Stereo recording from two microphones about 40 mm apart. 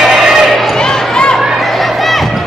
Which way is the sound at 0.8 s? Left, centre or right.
Centre.